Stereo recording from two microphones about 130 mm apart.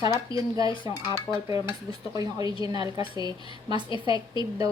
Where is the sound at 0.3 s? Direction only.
30° right (ahead or behind).